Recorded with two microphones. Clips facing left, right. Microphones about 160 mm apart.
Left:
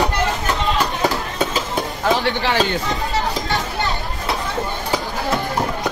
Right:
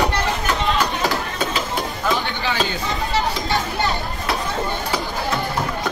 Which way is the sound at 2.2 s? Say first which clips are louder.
Left 4 dB; 80° left.